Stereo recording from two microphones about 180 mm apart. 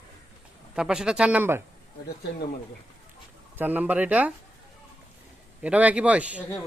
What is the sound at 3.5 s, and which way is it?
Speech, 10° right (ahead or behind).